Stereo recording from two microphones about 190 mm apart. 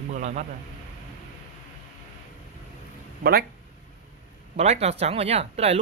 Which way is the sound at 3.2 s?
50° right (ahead or behind).